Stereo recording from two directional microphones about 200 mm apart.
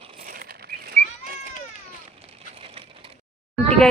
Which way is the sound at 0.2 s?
50° right (ahead or behind).